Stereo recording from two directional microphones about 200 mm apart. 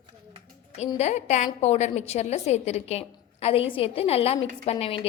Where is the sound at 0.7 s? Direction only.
35° left (ahead or behind).